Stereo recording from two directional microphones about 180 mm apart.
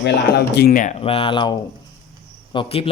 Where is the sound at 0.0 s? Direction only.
65° left (ahead or behind).